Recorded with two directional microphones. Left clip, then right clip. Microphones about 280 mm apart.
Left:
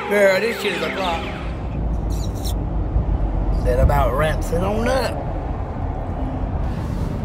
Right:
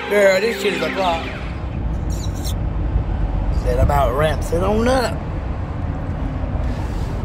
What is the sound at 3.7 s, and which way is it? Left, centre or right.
Speech, centre.